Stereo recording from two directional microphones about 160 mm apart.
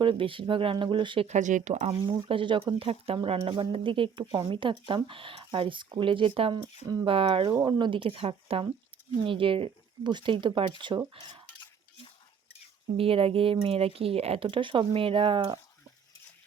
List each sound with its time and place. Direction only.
0.0 s speech: 30° right (ahead or behind)
1.3 s speech: 50° right (ahead or behind)
1.9 s speech: 30° right (ahead or behind)
13.0 s speech: 35° right (ahead or behind)